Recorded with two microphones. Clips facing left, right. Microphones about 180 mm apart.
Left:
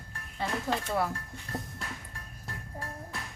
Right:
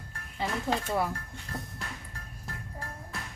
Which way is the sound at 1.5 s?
20° left (ahead or behind).